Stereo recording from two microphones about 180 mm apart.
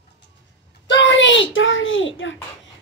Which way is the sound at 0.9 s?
85° left.